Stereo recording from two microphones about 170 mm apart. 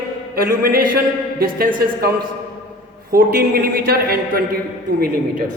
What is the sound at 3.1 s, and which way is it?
A man's voice, 55° right (ahead or behind).